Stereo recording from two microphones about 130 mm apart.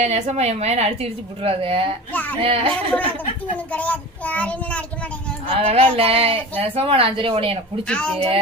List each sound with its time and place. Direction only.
0.0 s a woman's voice: 55° right (ahead or behind)
1.4 s speech: 45° right (ahead or behind)
2.1 s a child's voice: 10° left (ahead or behind)
2.4 s speech: 45° right (ahead or behind)
3.7 s a child's voice: 10° left (ahead or behind)
5.5 s speech: 50° right (ahead or behind)
7.9 s a child's voice: 5° left (ahead or behind)